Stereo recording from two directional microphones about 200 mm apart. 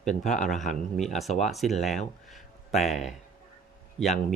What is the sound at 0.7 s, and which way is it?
Speech, centre (ahead or behind).